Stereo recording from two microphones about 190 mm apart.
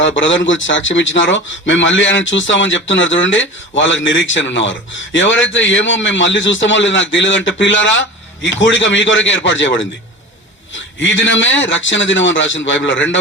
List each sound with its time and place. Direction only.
0.2 s a man's voice: 75° left (ahead or behind)
11.0 s a man's voice: 75° left (ahead or behind)